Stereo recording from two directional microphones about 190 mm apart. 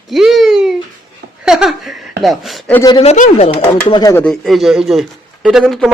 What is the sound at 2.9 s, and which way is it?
Speech, 35° left (ahead or behind).